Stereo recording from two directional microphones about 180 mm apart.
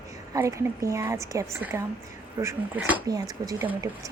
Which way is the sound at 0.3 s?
15° right (ahead or behind).